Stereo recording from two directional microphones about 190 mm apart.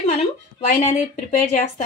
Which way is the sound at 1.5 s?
35° left (ahead or behind).